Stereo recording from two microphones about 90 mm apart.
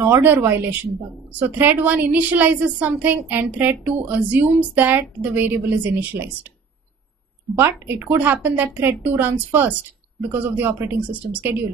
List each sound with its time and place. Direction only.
0.0 s a woman's voice: 25° right (ahead or behind)
7.5 s a woman's voice: 25° right (ahead or behind)